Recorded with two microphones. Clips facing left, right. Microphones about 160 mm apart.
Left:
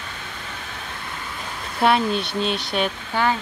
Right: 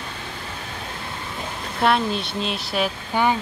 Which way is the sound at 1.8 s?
Centre (ahead or behind).